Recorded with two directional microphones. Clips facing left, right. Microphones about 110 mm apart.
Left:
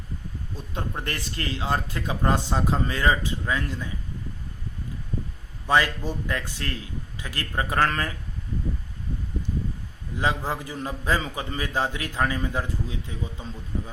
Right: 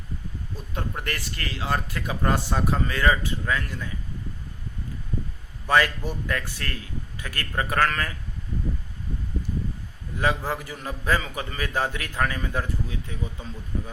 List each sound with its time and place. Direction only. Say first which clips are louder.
0.7 s a man's voice: even; 25° left (ahead or behind)
5.6 s a man's voice: even; 15° left (ahead or behind)
10.2 s a man's voice: right 1 dB; 15° left (ahead or behind)